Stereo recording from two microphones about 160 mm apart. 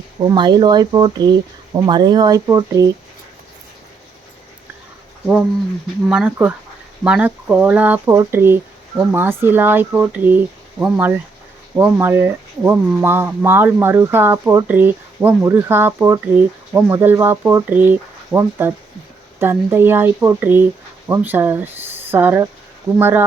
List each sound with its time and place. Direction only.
0.2 s speech: 25° right (ahead or behind)
6.1 s speech: 10° right (ahead or behind)